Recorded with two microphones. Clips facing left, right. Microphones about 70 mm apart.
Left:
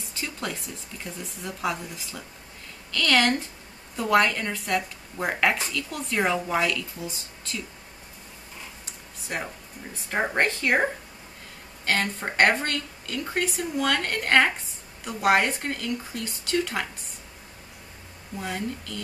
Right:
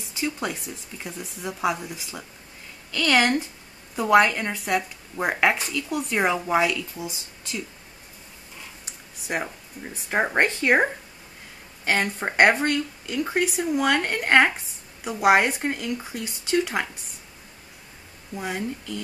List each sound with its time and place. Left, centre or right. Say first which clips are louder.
0.1 s a sound: right 5 dB; centre
1.0 s speech: right 3 dB; centre
9.3 s speech: right 4 dB; centre
18.3 s speech: right 2 dB; centre